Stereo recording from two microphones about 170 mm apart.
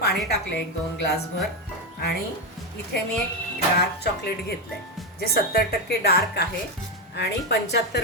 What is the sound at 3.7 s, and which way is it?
Speech, 70° left (ahead or behind).